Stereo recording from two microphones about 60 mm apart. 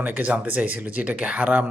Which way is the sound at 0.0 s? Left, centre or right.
Right.